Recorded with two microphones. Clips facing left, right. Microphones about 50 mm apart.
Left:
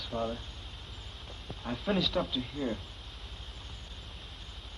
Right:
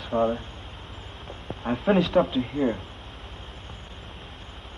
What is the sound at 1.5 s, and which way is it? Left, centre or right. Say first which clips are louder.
Speech: right 10 dB; right.